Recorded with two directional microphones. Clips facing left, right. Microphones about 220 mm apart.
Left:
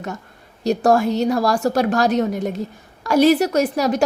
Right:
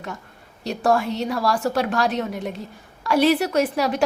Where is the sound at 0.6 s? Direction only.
40° left (ahead or behind).